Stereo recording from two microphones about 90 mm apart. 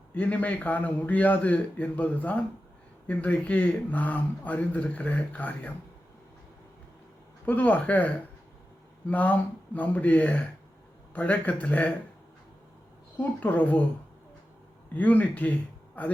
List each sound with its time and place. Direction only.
0.1 s speech: 15° left (ahead or behind)
7.4 s speech: 20° left (ahead or behind)
13.1 s speech: 20° left (ahead or behind)
14.9 s speech: 20° left (ahead or behind)